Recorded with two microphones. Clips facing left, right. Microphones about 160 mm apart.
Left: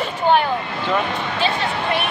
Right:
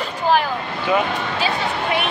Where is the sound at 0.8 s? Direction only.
5° right (ahead or behind).